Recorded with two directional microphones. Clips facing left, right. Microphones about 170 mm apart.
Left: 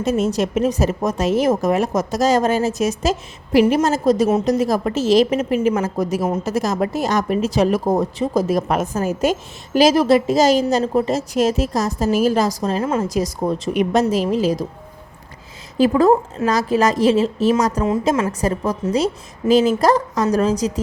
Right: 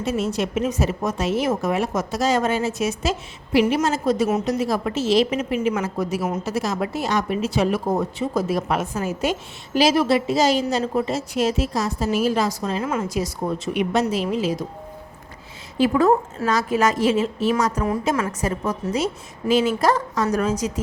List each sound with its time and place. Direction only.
0.0 s speech: 40° left (ahead or behind)
15.8 s speech: 35° left (ahead or behind)
18.1 s a woman's voice: 25° left (ahead or behind)
18.3 s speech: 35° left (ahead or behind)